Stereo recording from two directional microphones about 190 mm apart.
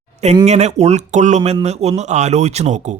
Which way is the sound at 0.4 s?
35° right (ahead or behind).